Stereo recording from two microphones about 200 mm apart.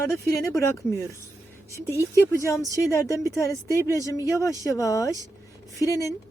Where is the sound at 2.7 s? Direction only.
15° left (ahead or behind).